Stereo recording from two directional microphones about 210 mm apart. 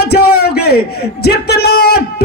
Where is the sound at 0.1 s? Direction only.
50° left (ahead or behind).